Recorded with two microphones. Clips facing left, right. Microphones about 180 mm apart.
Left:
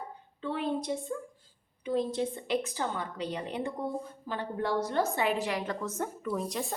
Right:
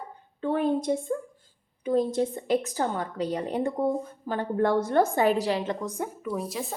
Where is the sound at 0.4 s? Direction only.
50° right (ahead or behind); by 5.7 s 30° right (ahead or behind).